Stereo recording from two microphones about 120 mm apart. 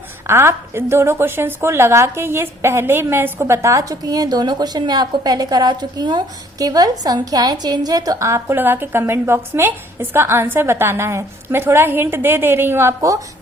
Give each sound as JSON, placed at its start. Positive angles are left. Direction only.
{"t": 0.3, "sound": "a woman's voice", "side_deg": -20}